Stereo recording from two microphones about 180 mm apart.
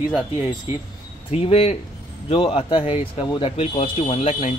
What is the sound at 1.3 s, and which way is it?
Speech, 35° left (ahead or behind).